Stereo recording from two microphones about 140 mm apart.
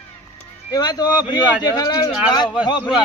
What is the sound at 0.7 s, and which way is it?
Speech, 30° left (ahead or behind).